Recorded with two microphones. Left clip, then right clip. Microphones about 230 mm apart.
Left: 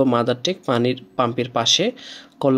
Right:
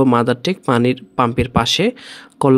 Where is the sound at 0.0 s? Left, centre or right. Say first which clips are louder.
Right 3 dB; right.